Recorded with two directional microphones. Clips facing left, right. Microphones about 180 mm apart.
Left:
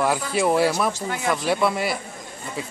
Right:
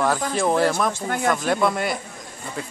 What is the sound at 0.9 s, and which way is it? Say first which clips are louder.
Speech: right 2 dB; 50° right (ahead or behind).